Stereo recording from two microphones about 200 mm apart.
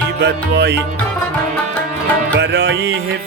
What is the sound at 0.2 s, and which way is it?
Music, 55° right (ahead or behind).